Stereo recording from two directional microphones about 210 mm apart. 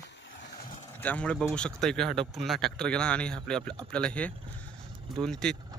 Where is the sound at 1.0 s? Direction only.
5° left (ahead or behind).